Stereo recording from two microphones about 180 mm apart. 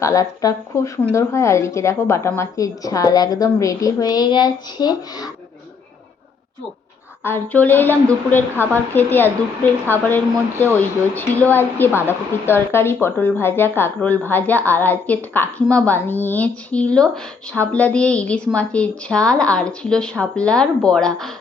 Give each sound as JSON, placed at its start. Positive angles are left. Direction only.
{"t": 0.0, "sound": "speech", "side_deg": 20}
{"t": 7.3, "sound": "a woman's voice", "side_deg": 10}